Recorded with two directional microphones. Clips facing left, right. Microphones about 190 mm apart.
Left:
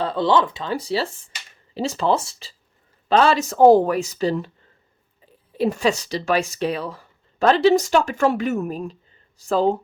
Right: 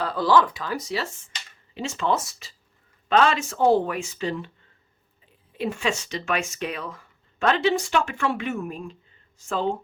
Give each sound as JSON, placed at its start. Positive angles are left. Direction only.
{"t": 0.0, "sound": "speech", "side_deg": 25}